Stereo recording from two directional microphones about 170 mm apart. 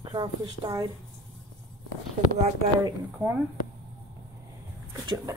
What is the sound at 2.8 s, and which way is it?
Speech, 10° right (ahead or behind).